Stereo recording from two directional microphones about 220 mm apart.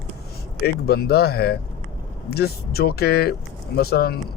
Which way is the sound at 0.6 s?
45° left (ahead or behind).